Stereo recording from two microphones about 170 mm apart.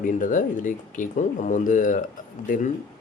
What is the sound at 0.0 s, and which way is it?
Speech, 50° left (ahead or behind).